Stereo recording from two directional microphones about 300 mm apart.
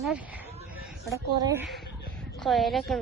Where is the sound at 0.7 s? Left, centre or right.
Centre.